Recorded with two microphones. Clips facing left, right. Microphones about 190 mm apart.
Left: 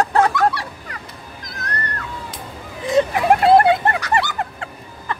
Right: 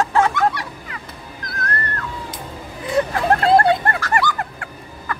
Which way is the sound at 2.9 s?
20° left (ahead or behind).